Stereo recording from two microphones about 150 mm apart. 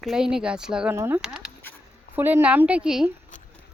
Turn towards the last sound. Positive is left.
turn(degrees=-5)  # may be behind; listen again after turning